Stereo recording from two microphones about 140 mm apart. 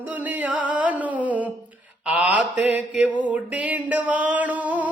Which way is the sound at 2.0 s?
10° right (ahead or behind).